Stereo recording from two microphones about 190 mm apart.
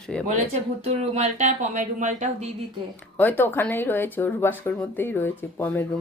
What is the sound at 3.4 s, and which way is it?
Speech, 10° left (ahead or behind).